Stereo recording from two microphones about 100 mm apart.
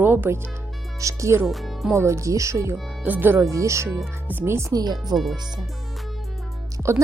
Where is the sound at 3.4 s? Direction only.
30° right (ahead or behind).